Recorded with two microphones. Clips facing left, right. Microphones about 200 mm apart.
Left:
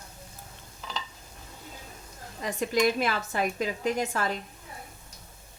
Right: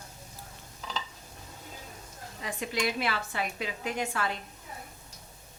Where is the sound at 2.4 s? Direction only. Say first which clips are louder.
Left 7 dB; 45° left (ahead or behind).